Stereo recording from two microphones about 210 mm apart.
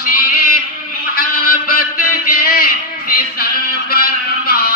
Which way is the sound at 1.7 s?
45° left (ahead or behind).